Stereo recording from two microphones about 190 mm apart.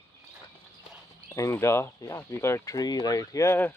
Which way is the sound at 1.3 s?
15° left (ahead or behind).